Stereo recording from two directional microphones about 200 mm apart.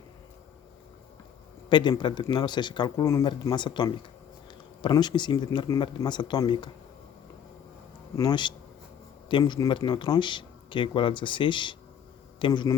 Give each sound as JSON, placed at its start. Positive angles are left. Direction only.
{"t": 1.7, "sound": "speech", "side_deg": 25}
{"t": 8.1, "sound": "speech", "side_deg": 15}